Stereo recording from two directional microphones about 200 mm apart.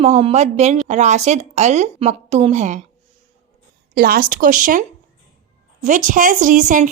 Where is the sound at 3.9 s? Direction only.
50° right (ahead or behind).